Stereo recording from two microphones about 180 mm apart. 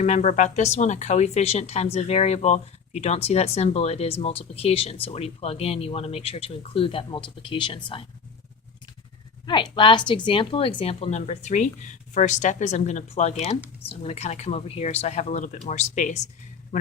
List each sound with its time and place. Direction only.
0.0 s speech: 40° left (ahead or behind)
9.5 s speech: 25° left (ahead or behind)